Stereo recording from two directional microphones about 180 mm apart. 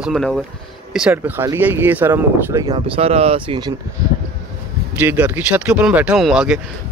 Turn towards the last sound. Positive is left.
turn(degrees=-5)  # may be behind; listen again after turning